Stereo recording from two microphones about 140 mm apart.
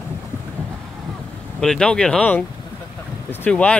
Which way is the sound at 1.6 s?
5° left (ahead or behind).